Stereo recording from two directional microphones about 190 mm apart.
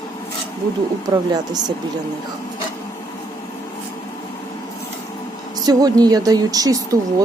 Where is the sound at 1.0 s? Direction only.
20° right (ahead or behind).